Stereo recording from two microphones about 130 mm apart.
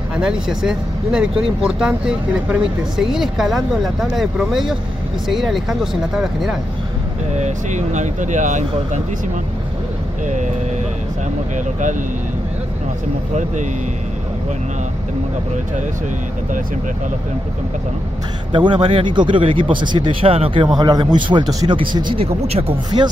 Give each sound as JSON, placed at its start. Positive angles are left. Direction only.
{"t": 0.1, "sound": "speech", "side_deg": -5}
{"t": 7.3, "sound": "speech", "side_deg": -65}
{"t": 10.2, "sound": "vehicle", "side_deg": -70}
{"t": 11.5, "sound": "speech", "side_deg": -75}
{"t": 18.5, "sound": "speech", "side_deg": -40}